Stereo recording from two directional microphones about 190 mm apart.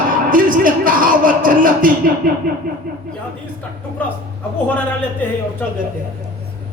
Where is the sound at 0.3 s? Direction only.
45° right (ahead or behind).